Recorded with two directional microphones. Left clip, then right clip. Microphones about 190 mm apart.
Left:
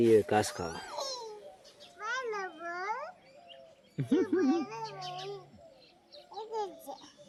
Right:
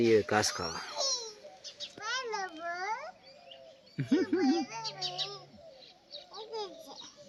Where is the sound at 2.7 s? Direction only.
65° left (ahead or behind).